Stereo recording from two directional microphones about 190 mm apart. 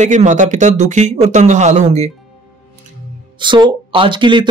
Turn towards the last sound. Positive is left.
turn(degrees=-25)  # may be behind; listen again after turning